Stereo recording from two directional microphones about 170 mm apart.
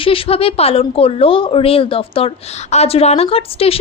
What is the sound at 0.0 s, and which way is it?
Speech, 30° left (ahead or behind).